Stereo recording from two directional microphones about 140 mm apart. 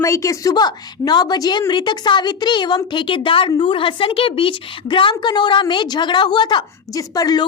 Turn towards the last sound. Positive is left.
turn(degrees=30)  # may be behind; listen again after turning